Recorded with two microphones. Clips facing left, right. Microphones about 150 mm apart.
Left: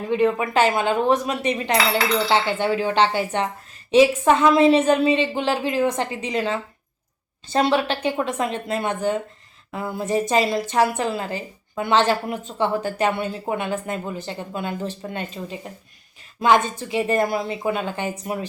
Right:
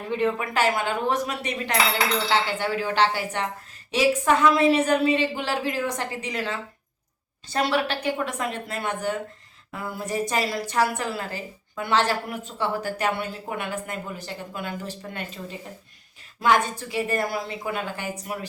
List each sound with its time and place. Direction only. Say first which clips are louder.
0.1 s dishes: left 5 dB; 20° left (ahead or behind)